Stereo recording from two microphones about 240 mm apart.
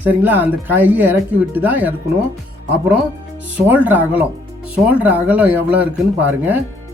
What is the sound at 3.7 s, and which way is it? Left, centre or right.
Speech, centre.